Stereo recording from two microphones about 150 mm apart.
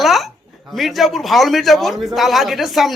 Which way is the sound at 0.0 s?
Centre (ahead or behind).